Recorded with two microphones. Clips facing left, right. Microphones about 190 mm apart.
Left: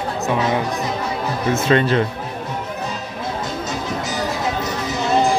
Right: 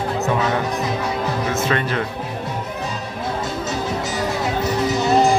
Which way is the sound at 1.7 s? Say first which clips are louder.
Left 8 dB; 30° left (ahead or behind).